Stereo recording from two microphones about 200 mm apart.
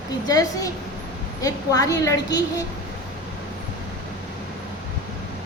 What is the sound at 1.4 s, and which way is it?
A woman's voice, 15° left (ahead or behind).